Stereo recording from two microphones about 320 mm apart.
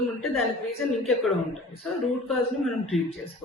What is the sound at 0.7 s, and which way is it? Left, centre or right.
Speech, centre.